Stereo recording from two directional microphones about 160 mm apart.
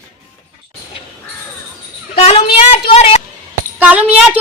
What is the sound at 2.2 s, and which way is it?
A woman's voice, 40° left (ahead or behind).